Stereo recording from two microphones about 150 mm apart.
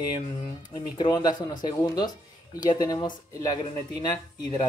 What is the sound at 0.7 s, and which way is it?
Speech, 30° left (ahead or behind).